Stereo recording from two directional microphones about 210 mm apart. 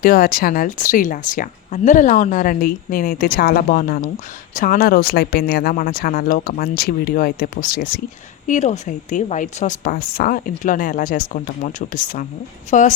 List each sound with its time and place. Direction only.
0.0 s a woman's voice: 45° left (ahead or behind)